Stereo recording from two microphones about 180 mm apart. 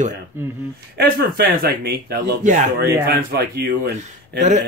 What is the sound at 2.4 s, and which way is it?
Speech, 45° right (ahead or behind).